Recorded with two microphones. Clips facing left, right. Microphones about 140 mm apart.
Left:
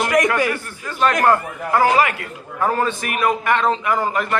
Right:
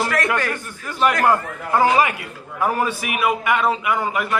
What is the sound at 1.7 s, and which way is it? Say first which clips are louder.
A man's voice: left 1 dB; 20° right (ahead or behind).